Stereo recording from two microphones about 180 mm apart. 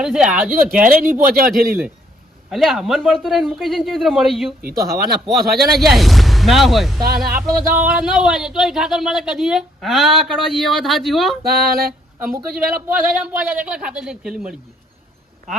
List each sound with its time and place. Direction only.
0.0 s speech: 5° right (ahead or behind)
0.9 s speech: 50° right (ahead or behind)
2.5 s speech: centre (ahead or behind)
4.6 s music: 60° right (ahead or behind)
5.3 s speech: centre (ahead or behind)
11.4 s music: 55° right (ahead or behind)
13.0 s speech: 10° right (ahead or behind)